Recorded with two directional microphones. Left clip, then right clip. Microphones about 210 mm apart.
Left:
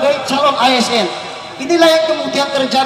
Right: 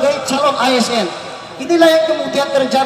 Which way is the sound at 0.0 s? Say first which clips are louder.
Left 1 dB; 55° right (ahead or behind).